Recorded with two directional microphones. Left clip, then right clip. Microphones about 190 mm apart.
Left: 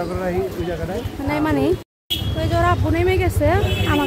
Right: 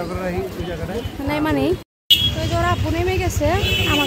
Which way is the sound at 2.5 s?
15° left (ahead or behind).